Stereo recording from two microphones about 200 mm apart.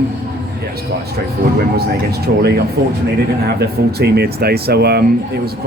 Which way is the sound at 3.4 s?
55° right (ahead or behind).